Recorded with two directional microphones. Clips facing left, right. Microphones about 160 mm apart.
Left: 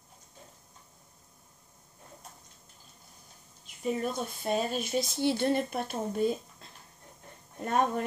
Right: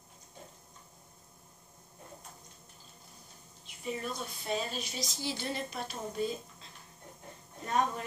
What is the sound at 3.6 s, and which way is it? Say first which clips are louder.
Speech: left 6 dB; 45° left (ahead or behind).